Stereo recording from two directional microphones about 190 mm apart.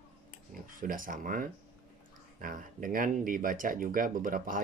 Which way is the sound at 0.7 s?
45° right (ahead or behind).